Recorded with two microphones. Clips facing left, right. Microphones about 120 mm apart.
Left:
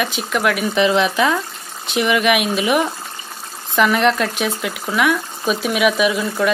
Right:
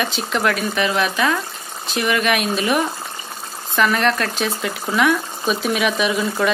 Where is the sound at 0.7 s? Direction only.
20° left (ahead or behind); by 6.5 s centre (ahead or behind).